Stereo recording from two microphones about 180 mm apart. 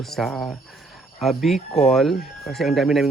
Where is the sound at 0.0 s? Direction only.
Centre (ahead or behind).